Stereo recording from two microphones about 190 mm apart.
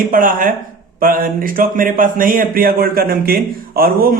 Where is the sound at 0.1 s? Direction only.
45° right (ahead or behind).